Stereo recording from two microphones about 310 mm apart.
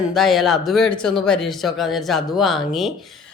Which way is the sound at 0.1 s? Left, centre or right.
Centre.